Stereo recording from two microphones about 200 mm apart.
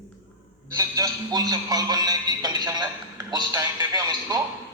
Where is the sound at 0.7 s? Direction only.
20° right (ahead or behind).